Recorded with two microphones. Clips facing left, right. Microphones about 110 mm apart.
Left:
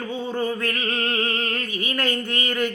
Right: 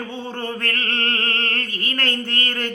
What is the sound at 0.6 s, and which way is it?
Music, 10° left (ahead or behind).